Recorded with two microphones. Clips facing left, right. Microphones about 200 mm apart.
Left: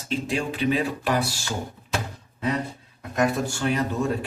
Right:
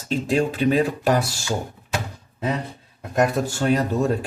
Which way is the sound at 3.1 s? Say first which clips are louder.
Right 3 dB; 40° right (ahead or behind).